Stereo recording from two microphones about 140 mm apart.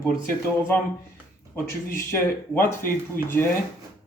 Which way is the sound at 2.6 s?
15° left (ahead or behind).